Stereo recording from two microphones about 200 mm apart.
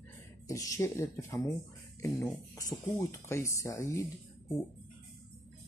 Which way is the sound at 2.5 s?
15° left (ahead or behind).